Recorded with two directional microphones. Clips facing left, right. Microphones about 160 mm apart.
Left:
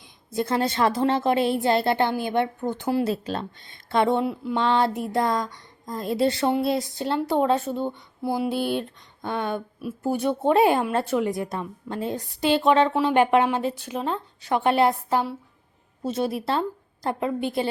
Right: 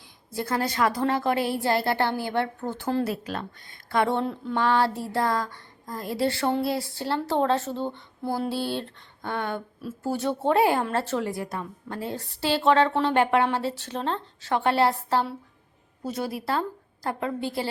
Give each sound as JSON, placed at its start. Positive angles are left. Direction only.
{"t": 0.3, "sound": "a woman's voice", "side_deg": 25}
{"t": 4.5, "sound": "a woman's voice", "side_deg": 20}
{"t": 7.9, "sound": "a sound", "side_deg": 10}
{"t": 16.0, "sound": "a woman's voice", "side_deg": 25}